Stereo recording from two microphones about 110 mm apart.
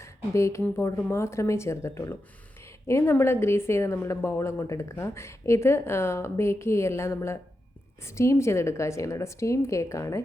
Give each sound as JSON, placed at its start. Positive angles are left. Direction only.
{"t": 0.0, "sound": "a woman's voice", "side_deg": 25}